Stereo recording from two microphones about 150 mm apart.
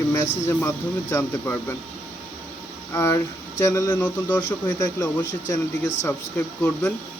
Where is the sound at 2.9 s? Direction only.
20° left (ahead or behind).